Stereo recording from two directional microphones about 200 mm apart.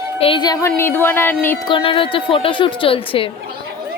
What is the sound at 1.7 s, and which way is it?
Speech, 25° left (ahead or behind).